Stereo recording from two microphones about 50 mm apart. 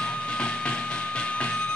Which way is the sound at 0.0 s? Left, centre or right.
Centre.